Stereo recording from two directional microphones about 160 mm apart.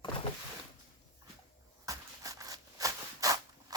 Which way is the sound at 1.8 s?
20° right (ahead or behind).